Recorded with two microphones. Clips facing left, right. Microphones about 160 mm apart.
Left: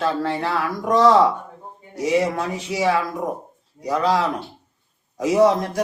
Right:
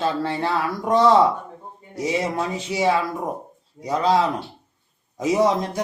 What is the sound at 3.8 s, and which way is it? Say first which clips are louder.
Speech: even; 25° right (ahead or behind).